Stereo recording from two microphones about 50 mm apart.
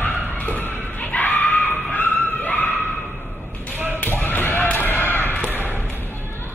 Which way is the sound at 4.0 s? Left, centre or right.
Left.